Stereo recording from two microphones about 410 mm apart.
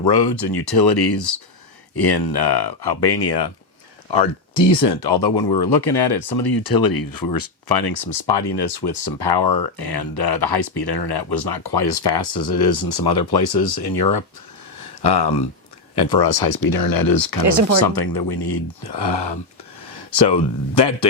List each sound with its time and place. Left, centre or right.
0.0 s speech: left
4.7 s speech: left
14.8 s a sound: left
16.0 s speech: left
17.4 s speech: right
17.7 s speech: left